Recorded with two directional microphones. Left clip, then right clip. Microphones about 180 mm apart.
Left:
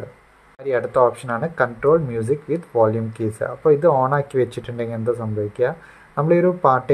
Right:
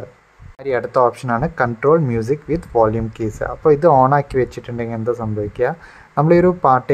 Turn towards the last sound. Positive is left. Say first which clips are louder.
# right 3 dB
turn(degrees=-15)  # may be behind; listen again after turning